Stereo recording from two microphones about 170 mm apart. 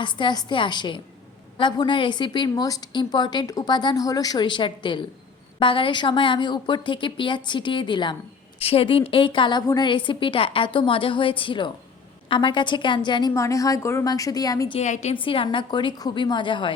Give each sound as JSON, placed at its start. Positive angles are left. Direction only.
{"t": 0.0, "sound": "a woman's voice", "side_deg": 25}
{"t": 14.8, "sound": "a woman's voice", "side_deg": 45}
{"t": 15.1, "sound": "a woman's voice", "side_deg": 30}